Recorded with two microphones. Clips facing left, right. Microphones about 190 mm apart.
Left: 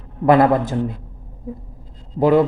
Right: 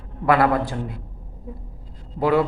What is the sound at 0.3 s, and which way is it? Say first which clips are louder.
Speech: left 5 dB; 20° left (ahead or behind).